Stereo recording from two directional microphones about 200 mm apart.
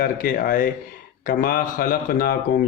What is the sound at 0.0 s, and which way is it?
Speech, 45° left (ahead or behind).